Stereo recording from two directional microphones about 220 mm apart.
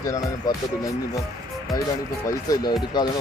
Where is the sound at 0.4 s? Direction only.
20° left (ahead or behind).